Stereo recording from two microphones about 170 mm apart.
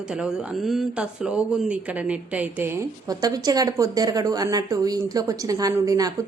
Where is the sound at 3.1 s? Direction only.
20° right (ahead or behind).